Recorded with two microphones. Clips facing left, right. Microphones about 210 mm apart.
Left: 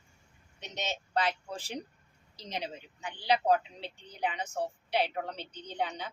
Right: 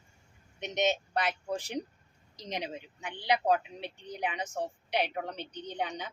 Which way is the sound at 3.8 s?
20° right (ahead or behind).